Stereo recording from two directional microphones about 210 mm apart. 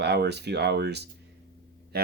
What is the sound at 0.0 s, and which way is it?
Speech, 50° right (ahead or behind).